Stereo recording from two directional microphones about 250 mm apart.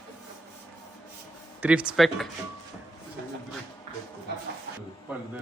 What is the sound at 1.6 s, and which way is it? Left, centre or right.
Speech, centre.